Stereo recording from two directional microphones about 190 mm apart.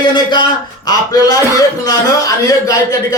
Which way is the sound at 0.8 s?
20° left (ahead or behind).